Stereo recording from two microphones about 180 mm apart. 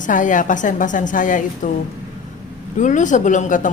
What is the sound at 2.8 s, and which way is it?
Speech, 45° left (ahead or behind).